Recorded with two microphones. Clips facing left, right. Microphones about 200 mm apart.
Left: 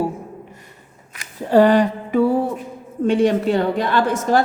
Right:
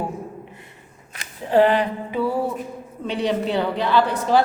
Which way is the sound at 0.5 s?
40° left (ahead or behind).